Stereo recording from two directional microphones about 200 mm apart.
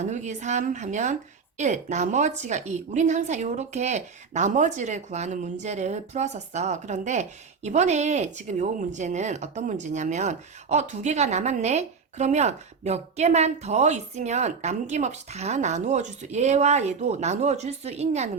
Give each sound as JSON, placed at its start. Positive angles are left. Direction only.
{"t": 0.0, "sound": "a woman's voice", "side_deg": -35}